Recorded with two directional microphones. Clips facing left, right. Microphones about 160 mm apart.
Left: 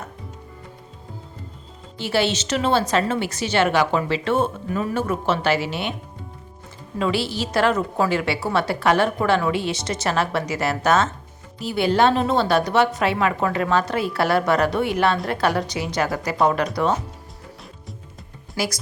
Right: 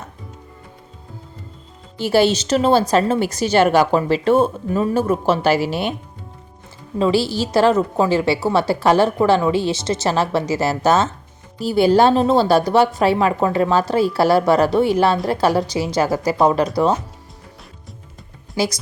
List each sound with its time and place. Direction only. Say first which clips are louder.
2.0 s a woman's voice: right 6 dB; 40° right (ahead or behind)
7.0 s a woman's voice: right 5 dB; 35° right (ahead or behind)
18.6 s speech: right 5 dB; 25° right (ahead or behind)